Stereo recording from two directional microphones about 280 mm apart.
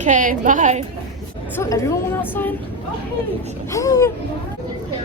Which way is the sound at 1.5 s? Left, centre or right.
Centre.